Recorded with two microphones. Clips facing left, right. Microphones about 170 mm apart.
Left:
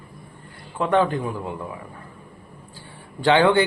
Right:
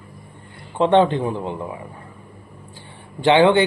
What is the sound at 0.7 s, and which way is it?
A man's voice, 25° right (ahead or behind).